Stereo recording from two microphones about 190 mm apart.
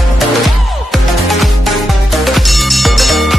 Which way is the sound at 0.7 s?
Centre (ahead or behind).